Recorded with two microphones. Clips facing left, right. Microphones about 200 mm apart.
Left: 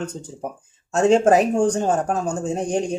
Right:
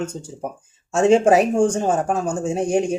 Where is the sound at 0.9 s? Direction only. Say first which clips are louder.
Right 1 dB; 5° right (ahead or behind).